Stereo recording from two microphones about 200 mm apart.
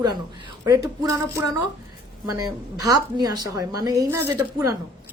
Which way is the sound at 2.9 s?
20° right (ahead or behind).